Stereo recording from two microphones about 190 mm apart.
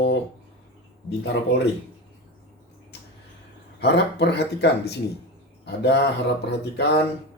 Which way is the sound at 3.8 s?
60° left (ahead or behind).